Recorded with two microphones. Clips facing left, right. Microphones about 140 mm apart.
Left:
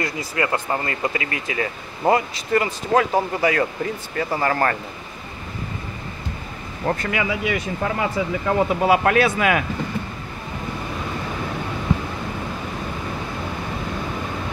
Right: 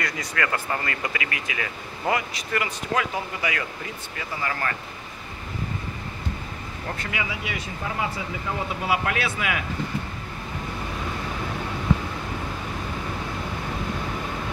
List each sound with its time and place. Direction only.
0.0 s speech: 30° left (ahead or behind); by 4.7 s 45° left (ahead or behind)
6.9 s speech: 55° left (ahead or behind)
8.8 s speech: 45° left (ahead or behind)